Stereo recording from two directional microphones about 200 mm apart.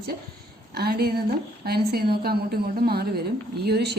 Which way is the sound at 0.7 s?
50° right (ahead or behind).